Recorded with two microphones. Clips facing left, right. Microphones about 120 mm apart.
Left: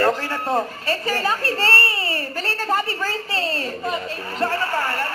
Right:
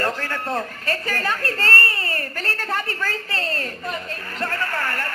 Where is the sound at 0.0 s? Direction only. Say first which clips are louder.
Left 5 dB; 10° left (ahead or behind).